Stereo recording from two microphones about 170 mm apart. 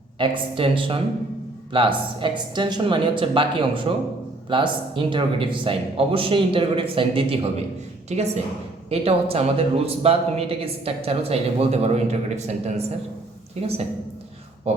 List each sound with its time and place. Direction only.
0.2 s a man's voice: 30° right (ahead or behind)